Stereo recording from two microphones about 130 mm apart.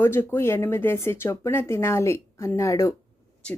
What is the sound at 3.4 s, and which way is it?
Speech, 10° left (ahead or behind).